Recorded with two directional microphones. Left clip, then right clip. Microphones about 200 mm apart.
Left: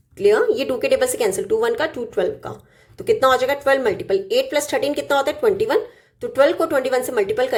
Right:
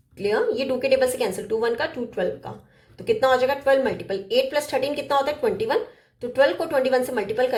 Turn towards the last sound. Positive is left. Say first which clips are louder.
# left 4 dB
turn(degrees=30)  # may be behind; listen again after turning